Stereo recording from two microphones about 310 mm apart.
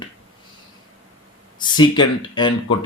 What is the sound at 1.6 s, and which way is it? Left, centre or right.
Speech, centre.